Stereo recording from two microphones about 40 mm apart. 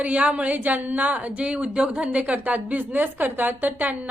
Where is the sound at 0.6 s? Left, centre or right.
Right.